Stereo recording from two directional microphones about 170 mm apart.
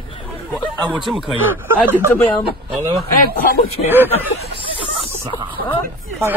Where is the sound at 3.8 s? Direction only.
10° right (ahead or behind).